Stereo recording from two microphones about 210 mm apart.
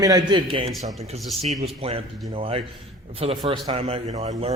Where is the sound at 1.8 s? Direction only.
25° right (ahead or behind).